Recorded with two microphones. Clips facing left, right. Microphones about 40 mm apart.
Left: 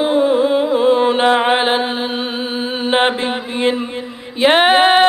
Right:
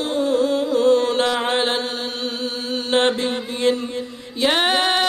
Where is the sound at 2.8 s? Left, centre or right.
Left.